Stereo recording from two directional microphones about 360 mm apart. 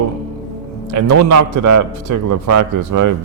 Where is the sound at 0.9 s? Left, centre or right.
Right.